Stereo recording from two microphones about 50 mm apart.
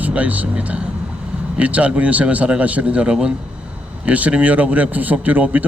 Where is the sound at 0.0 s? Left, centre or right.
Right.